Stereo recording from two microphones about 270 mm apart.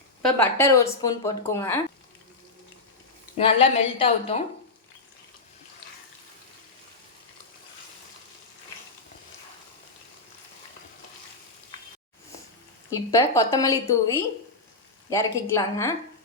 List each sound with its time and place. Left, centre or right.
0.2 s speech: centre
3.3 s a woman's voice: left
12.9 s speech: centre